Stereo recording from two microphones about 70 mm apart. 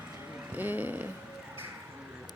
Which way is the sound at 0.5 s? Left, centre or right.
Right.